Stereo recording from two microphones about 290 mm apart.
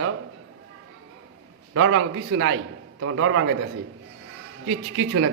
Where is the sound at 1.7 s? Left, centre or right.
Right.